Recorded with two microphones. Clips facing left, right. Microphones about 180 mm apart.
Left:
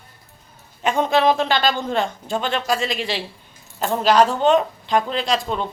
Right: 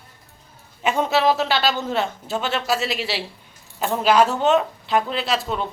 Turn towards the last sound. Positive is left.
turn(degrees=-5)  # may be behind; listen again after turning